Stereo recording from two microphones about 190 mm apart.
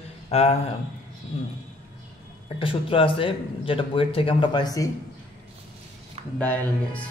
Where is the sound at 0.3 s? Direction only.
35° left (ahead or behind).